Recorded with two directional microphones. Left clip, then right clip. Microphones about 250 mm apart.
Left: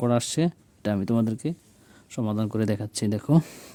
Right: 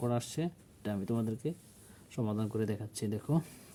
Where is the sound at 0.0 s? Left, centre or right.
Left.